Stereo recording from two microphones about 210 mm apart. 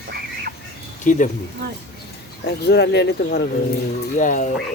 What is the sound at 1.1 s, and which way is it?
Speech, 40° left (ahead or behind).